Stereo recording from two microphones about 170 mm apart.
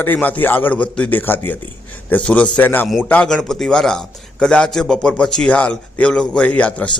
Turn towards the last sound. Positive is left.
turn(degrees=5)  # may be behind; listen again after turning